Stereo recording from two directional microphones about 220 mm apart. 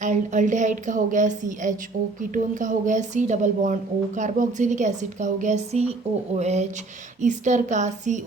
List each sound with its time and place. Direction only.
0.0 s a woman's voice: 35° right (ahead or behind)